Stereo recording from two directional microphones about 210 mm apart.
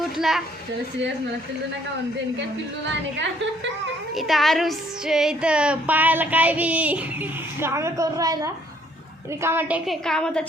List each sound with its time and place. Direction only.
0.0 s a child's voice: centre (ahead or behind)
2.8 s a woman's voice: 60° right (ahead or behind)
4.1 s female singing: centre (ahead or behind); by 8.4 s 15° right (ahead or behind)
9.4 s a woman's voice: 10° right (ahead or behind)